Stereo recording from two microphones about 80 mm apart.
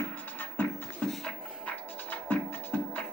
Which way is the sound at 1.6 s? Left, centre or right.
Left.